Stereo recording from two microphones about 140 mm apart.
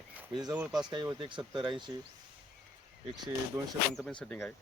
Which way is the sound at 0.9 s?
35° right (ahead or behind).